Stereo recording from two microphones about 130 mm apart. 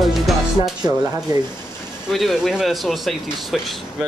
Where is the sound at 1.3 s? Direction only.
30° right (ahead or behind).